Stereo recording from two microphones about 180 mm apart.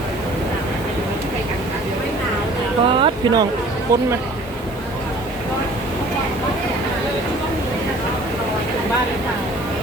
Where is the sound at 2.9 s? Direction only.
30° right (ahead or behind).